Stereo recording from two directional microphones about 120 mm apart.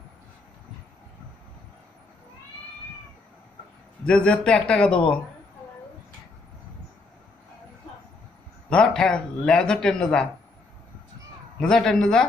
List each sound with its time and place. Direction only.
4.0 s speech: 10° left (ahead or behind)
8.7 s speech: 5° left (ahead or behind)
11.6 s speech: 5° left (ahead or behind)